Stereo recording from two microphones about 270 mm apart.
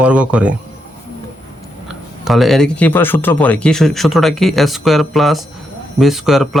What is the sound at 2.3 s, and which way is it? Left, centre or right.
Speech, centre.